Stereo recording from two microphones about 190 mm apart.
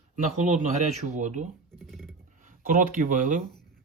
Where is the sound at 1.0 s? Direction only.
40° right (ahead or behind).